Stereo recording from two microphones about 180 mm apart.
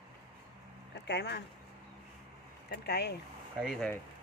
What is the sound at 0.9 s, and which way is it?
Speech, 70° left (ahead or behind).